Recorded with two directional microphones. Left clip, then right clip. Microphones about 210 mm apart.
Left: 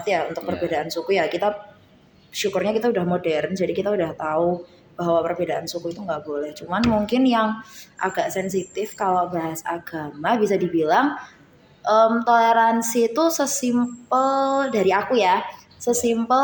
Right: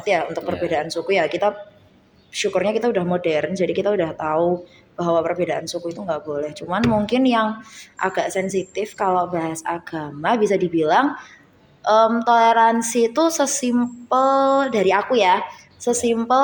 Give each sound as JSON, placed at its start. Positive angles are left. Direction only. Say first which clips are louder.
{"t": 0.0, "sound": "a woman's voice", "louder": "right 2 dB", "side_deg": -30}